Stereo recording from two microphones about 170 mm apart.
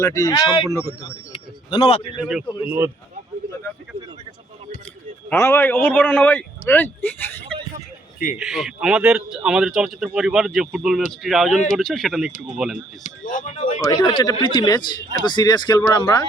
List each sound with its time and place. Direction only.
0.0 s speech: 20° left (ahead or behind)
1.3 s a sound: 35° left (ahead or behind)
2.6 s speech: 15° right (ahead or behind)
5.3 s a man's voice: 15° left (ahead or behind)
8.4 s a man's voice: centre (ahead or behind)
13.0 s speech: 50° left (ahead or behind)
13.9 s speech: 25° left (ahead or behind)